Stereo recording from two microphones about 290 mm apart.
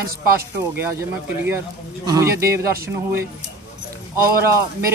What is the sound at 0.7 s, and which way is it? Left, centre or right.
Speech, centre.